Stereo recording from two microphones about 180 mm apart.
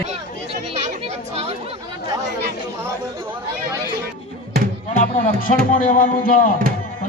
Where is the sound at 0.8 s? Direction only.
35° right (ahead or behind).